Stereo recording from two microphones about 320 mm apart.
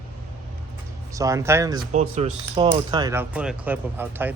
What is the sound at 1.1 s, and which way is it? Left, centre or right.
Speech, centre.